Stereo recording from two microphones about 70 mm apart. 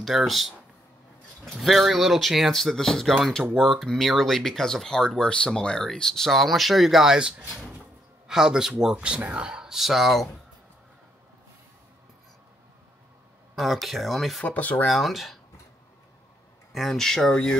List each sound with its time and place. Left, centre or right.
0.0 s speech: centre
13.6 s speech: centre
14.4 s speech: left
14.9 s speech: centre
16.7 s speech: centre